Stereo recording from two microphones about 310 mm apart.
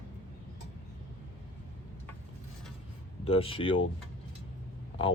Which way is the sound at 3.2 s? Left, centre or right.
Centre.